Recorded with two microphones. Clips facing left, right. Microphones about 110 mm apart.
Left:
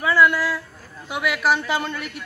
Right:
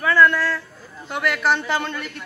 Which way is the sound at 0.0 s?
10° left (ahead or behind).